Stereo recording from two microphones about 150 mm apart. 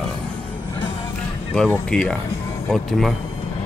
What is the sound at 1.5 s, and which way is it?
Speech, 5° left (ahead or behind).